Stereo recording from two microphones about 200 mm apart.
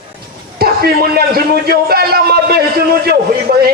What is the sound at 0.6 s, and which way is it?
A man's voice, 50° right (ahead or behind).